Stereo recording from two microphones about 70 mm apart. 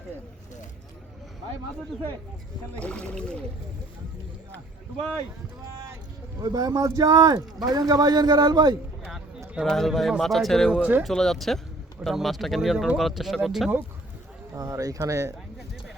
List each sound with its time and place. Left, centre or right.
2.7 s speech: centre
6.4 s speech: right
9.6 s speech: centre
10.7 s speech: centre
11.0 s speech: centre
14.6 s speech: right